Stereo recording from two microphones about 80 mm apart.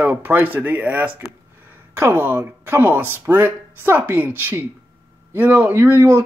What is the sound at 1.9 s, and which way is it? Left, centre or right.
Speech, right.